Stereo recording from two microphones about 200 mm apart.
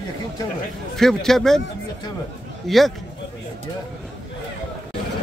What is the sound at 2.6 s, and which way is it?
Speech, centre (ahead or behind).